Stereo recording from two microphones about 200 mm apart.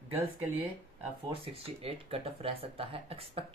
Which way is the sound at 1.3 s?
30° right (ahead or behind).